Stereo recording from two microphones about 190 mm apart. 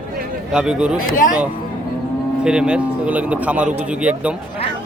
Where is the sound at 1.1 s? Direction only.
45° left (ahead or behind).